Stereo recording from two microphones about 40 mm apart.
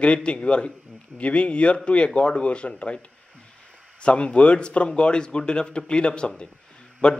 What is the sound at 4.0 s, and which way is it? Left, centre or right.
A man's voice, left.